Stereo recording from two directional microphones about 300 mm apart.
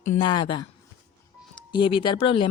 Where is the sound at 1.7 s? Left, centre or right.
Centre.